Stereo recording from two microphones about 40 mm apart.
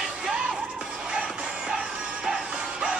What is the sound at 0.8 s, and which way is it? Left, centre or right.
Music, right.